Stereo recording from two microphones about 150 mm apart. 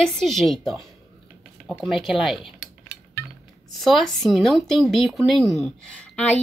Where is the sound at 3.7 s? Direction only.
Centre (ahead or behind).